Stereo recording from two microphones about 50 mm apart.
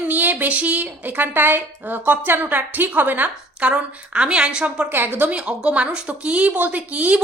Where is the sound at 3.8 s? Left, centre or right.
Right.